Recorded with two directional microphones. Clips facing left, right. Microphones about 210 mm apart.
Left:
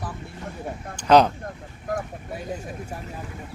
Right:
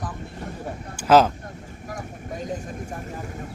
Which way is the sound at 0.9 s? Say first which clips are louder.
Even; 5° right (ahead or behind).